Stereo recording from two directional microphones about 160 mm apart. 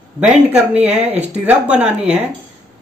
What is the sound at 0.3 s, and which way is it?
Speech, 5° right (ahead or behind).